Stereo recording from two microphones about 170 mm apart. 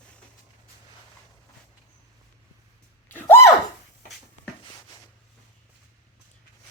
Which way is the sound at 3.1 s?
10° left (ahead or behind).